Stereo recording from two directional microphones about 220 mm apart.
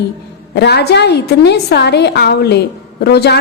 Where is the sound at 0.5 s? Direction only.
50° left (ahead or behind).